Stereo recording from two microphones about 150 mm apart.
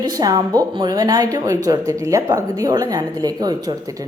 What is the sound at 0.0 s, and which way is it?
A woman's voice, 25° right (ahead or behind).